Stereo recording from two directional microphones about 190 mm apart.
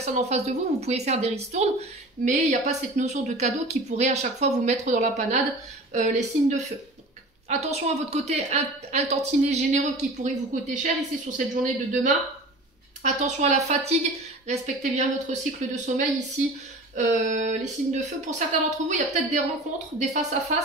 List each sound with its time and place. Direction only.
0.0 s a woman's voice: 35° right (ahead or behind)